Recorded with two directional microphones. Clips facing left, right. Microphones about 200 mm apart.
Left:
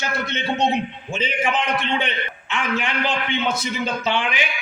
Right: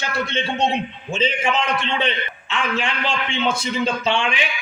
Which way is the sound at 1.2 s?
25° right (ahead or behind).